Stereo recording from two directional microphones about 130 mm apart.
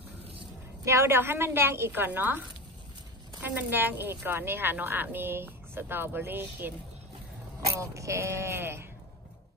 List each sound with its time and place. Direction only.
0.8 s speech: 20° right (ahead or behind)
3.4 s speech: 15° right (ahead or behind)
7.8 s speech: 25° right (ahead or behind)